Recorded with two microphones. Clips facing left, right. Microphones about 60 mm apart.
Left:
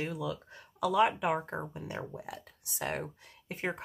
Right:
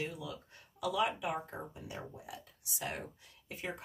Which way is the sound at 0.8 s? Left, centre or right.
Left.